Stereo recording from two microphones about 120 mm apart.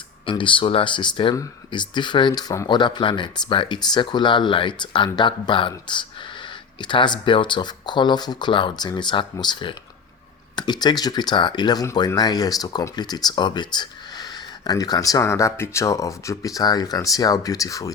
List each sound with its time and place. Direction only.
0.3 s speech: 45° left (ahead or behind); by 17.9 s 30° left (ahead or behind)